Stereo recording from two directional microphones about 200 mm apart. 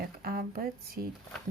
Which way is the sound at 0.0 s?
50° right (ahead or behind).